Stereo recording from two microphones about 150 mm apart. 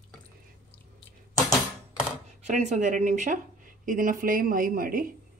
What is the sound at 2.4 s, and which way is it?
Speech, 50° right (ahead or behind).